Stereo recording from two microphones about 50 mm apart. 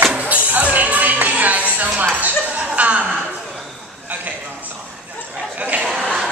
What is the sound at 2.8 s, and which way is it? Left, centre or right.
Chuckle, right.